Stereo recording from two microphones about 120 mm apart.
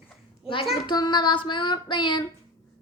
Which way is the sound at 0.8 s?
40° left (ahead or behind).